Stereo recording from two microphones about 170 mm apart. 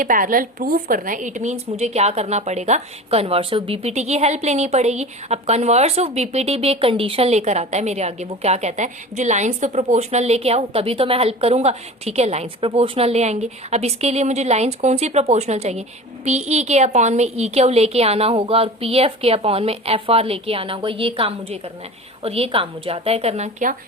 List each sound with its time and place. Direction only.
0.0 s speech: 55° right (ahead or behind)